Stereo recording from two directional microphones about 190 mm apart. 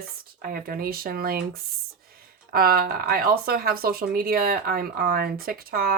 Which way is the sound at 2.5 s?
50° right (ahead or behind).